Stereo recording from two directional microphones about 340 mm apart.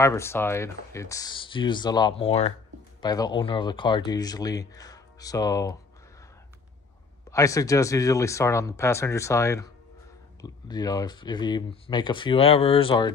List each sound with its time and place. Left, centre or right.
0.0 s speech: centre
7.2 s speech: centre